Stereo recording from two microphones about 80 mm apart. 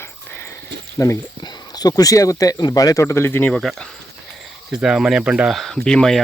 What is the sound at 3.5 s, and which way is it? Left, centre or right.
Speech, centre.